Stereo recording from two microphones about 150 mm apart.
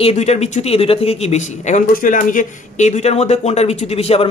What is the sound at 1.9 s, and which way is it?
Speech, 65° left (ahead or behind).